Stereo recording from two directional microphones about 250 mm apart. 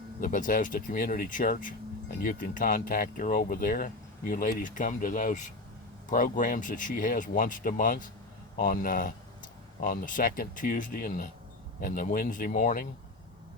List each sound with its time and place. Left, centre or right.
0.2 s speech: left